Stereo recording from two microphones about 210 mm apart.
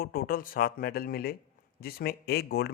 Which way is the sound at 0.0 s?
45° left (ahead or behind).